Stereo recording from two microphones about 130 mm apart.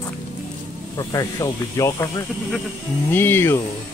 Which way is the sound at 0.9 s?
25° left (ahead or behind).